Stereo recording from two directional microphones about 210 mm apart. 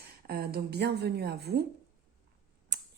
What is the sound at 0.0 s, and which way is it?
A woman's voice, 50° right (ahead or behind).